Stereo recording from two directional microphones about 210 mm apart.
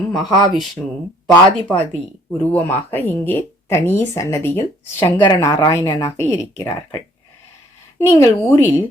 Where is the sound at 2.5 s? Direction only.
10° left (ahead or behind).